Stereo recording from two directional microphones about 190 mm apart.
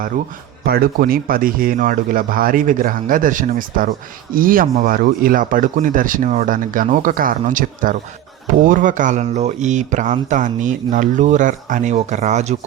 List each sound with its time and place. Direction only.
0.6 s speech: 50° right (ahead or behind)